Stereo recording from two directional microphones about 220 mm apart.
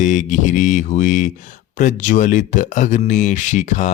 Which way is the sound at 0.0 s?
35° left (ahead or behind).